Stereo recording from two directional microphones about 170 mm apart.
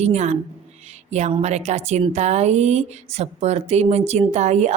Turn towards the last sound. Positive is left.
turn(degrees=-40)  # may be behind; listen again after turning